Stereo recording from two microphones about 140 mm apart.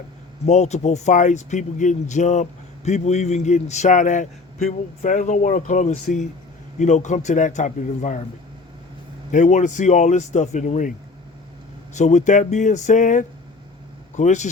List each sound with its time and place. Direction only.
0.4 s speech: 55° left (ahead or behind)
9.3 s speech: 60° left (ahead or behind)
11.9 s speech: 55° left (ahead or behind)